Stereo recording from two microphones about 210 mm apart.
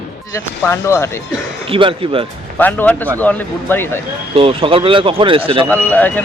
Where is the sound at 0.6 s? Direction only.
10° left (ahead or behind).